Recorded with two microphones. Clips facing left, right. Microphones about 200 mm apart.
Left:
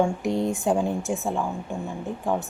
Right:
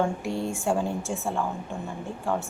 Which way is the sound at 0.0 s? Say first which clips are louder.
Left 4 dB; 20° left (ahead or behind).